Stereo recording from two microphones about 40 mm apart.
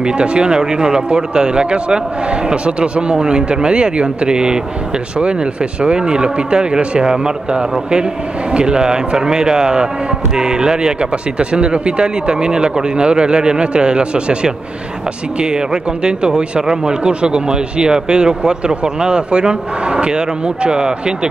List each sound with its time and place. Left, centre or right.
0.0 s speech: right